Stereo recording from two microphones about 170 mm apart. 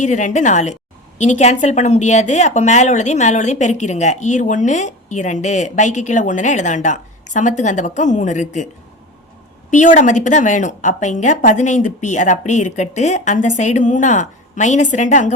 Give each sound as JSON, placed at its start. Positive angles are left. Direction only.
{"t": 0.0, "sound": "a woman's voice", "side_deg": 45}
{"t": 9.6, "sound": "a woman's voice", "side_deg": 50}